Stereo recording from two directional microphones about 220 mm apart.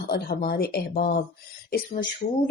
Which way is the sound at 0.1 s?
40° left (ahead or behind).